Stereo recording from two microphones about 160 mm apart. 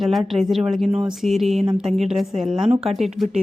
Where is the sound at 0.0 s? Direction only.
Centre (ahead or behind).